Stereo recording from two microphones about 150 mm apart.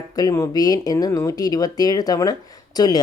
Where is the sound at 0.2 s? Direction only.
25° left (ahead or behind).